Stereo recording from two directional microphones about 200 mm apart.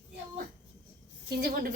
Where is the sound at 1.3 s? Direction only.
50° right (ahead or behind).